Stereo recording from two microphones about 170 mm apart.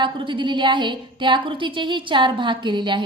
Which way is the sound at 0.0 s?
30° right (ahead or behind).